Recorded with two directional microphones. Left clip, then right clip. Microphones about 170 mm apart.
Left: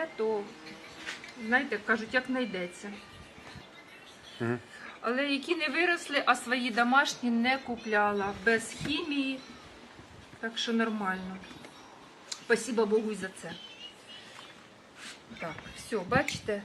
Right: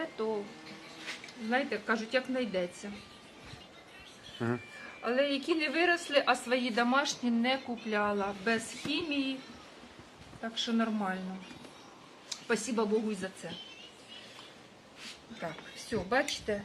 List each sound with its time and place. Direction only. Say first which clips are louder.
0.2 s a woman's voice: left 4 dB; 10° right (ahead or behind)
1.5 s a woman's voice: left 3 dB; 25° right (ahead or behind)
4.4 s speech: left 1 dB; 10° left (ahead or behind)
5.0 s a woman's voice: even; 10° right (ahead or behind)
10.4 s a woman's voice: left 2 dB; 10° right (ahead or behind)
12.5 s a woman's voice: left 4 dB; 10° right (ahead or behind)
15.4 s a woman's voice: left 1 dB; 10° right (ahead or behind)